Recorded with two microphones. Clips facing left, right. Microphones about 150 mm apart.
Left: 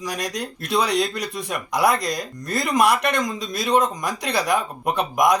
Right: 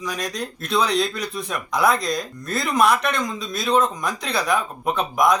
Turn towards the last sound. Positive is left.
turn(degrees=15)  # may be behind; listen again after turning